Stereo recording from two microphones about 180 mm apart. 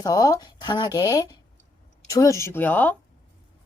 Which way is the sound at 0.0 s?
20° left (ahead or behind).